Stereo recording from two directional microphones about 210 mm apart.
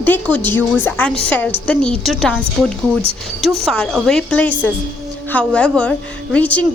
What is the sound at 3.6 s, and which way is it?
A woman's voice, 5° left (ahead or behind).